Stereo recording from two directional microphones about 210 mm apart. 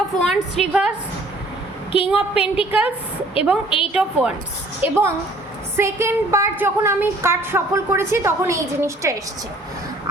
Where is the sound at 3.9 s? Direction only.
5° right (ahead or behind).